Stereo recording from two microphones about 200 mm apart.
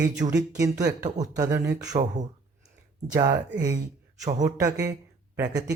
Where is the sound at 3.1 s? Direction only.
20° right (ahead or behind).